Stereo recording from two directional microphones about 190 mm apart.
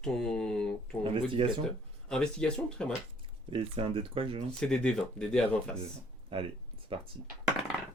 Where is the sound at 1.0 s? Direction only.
30° right (ahead or behind).